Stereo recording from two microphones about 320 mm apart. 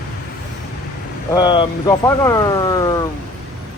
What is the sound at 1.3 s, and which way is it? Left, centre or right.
Speech, centre.